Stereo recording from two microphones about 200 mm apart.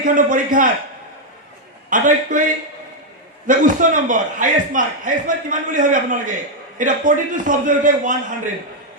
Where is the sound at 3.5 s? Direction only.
40° right (ahead or behind).